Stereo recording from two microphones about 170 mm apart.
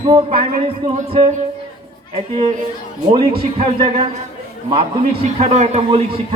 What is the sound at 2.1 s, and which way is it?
A man's voice, 40° right (ahead or behind).